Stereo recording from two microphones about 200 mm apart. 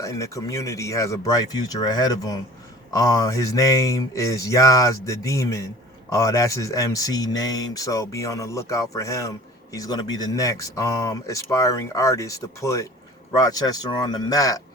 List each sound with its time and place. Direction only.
0.0 s speech: 15° left (ahead or behind)